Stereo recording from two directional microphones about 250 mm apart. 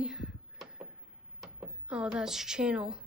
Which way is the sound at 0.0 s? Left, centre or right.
Centre.